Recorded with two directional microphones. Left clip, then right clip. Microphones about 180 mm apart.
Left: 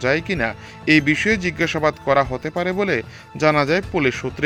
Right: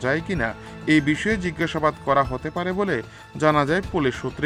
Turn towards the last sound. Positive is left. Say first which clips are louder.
# left 3 dB
turn(degrees=30)  # may be behind; listen again after turning